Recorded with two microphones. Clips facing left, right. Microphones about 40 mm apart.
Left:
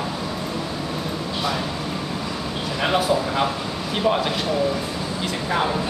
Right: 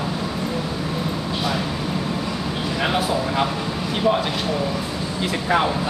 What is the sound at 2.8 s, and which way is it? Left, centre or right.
Speech, centre.